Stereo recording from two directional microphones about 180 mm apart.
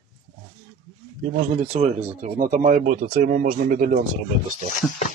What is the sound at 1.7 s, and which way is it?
Speech, 40° right (ahead or behind).